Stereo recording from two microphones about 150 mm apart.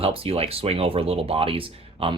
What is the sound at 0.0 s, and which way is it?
Speech, 40° right (ahead or behind).